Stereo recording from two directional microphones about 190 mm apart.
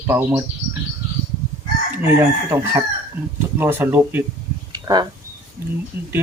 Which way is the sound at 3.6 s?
10° right (ahead or behind).